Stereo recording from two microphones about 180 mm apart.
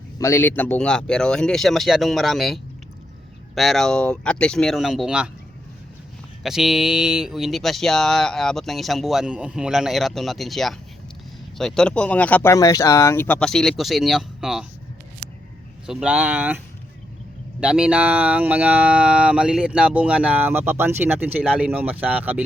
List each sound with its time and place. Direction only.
0.2 s speech: 15° left (ahead or behind); by 5.3 s 5° right (ahead or behind)
6.4 s speech: centre (ahead or behind)
15.9 s speech: 5° right (ahead or behind)
17.6 s speech: 5° right (ahead or behind)